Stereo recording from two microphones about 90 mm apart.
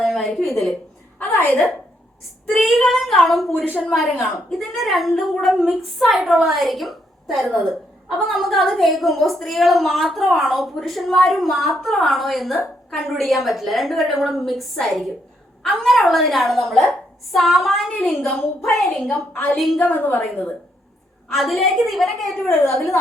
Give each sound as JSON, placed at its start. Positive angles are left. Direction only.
{"t": 0.0, "sound": "a sound", "side_deg": 5}
{"t": 2.5, "sound": "a woman's voice", "side_deg": 0}
{"t": 3.7, "sound": "a woman's voice", "side_deg": 15}
{"t": 3.9, "sound": "a woman's voice", "side_deg": 0}
{"t": 19.8, "sound": "a woman's voice", "side_deg": 20}
{"t": 21.3, "sound": "a woman's voice", "side_deg": 0}